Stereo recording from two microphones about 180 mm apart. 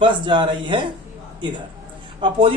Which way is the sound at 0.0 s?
25° right (ahead or behind).